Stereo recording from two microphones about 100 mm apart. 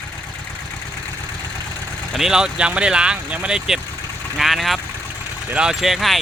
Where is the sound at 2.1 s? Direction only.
5° right (ahead or behind).